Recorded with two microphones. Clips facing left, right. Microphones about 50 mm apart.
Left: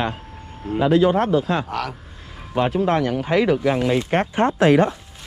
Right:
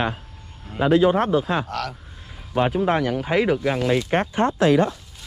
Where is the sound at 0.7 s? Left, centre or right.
Right.